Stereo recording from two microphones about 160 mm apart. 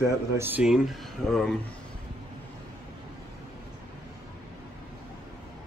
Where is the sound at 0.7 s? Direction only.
Centre (ahead or behind).